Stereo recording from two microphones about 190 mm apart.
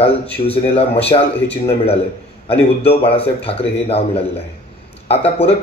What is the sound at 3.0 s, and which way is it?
Speech, 30° left (ahead or behind).